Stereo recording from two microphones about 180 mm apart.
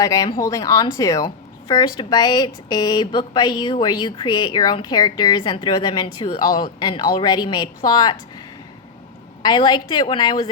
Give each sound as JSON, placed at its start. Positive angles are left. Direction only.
{"t": 0.0, "sound": "speech", "side_deg": 20}
{"t": 9.4, "sound": "speech", "side_deg": 25}